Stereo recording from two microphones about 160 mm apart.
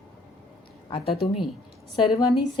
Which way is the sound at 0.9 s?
35° left (ahead or behind).